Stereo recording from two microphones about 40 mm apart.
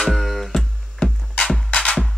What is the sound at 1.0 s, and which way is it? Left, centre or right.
Music, left.